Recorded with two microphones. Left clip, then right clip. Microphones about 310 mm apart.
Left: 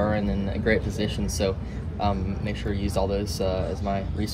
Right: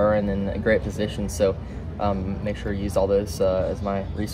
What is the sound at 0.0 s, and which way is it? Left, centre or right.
Speech, centre.